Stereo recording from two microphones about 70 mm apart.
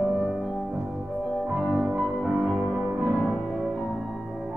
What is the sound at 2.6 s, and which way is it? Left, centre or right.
Music, centre.